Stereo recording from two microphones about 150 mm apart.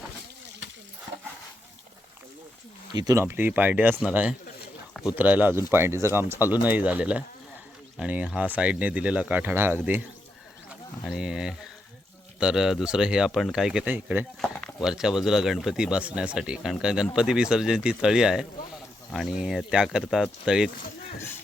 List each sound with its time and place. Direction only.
2.9 s speech: 25° right (ahead or behind)
11.0 s speech: 5° right (ahead or behind)
14.4 s speech: 5° left (ahead or behind)